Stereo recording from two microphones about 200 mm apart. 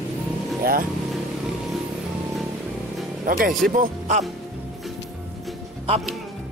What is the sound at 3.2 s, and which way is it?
Speech, 45° right (ahead or behind).